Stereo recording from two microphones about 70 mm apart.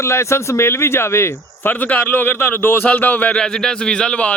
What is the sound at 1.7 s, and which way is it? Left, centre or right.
A man's voice, left.